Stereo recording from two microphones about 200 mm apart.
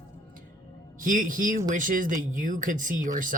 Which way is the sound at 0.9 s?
45° right (ahead or behind).